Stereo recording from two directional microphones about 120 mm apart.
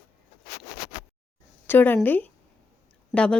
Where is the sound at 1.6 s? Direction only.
15° left (ahead or behind).